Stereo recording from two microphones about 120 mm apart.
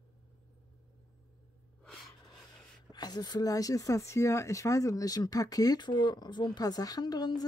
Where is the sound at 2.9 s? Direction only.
35° left (ahead or behind).